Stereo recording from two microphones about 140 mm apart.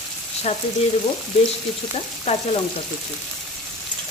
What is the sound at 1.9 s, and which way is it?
Speech, 50° left (ahead or behind).